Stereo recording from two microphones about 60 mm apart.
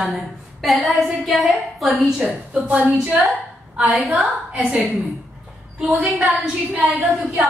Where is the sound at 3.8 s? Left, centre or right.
Centre.